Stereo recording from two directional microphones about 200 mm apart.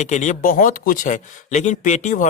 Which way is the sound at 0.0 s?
35° left (ahead or behind).